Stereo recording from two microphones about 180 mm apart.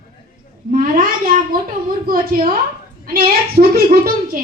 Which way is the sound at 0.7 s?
50° right (ahead or behind).